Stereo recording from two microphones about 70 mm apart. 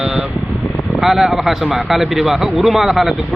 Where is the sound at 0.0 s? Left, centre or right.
Centre.